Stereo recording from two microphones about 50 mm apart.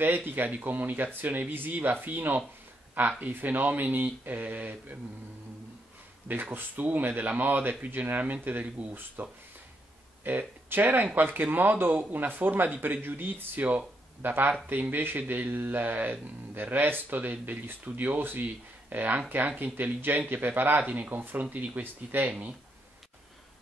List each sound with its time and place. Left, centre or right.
0.0 s speech: right
6.2 s speech: right
20.8 s speech: right
21.1 s speech: right